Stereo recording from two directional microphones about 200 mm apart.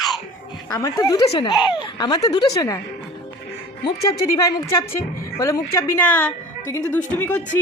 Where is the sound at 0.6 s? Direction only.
15° left (ahead or behind).